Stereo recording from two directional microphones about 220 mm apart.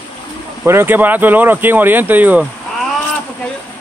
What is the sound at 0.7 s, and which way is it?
Speech, 10° right (ahead or behind).